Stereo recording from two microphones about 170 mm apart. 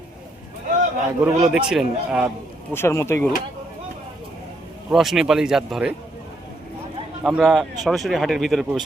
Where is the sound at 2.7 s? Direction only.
15° left (ahead or behind).